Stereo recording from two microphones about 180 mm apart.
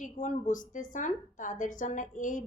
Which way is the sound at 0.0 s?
45° left (ahead or behind).